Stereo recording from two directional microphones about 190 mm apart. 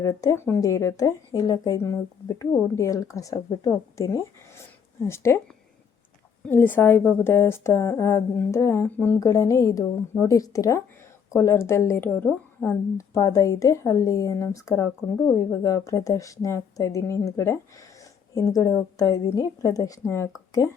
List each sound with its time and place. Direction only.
0.0 s speech: 15° left (ahead or behind)
6.4 s speech: 10° left (ahead or behind)